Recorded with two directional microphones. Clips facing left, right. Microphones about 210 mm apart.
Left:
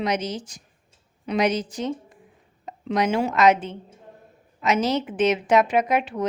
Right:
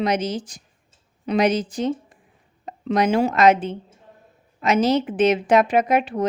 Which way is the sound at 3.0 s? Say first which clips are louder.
Right 4 dB; 35° right (ahead or behind).